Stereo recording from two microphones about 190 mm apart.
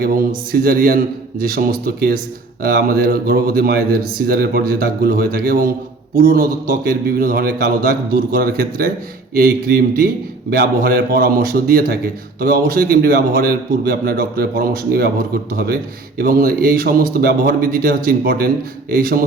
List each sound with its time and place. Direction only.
0.0 s a man's voice: 50° right (ahead or behind)
7.2 s a man's voice: 50° right (ahead or behind)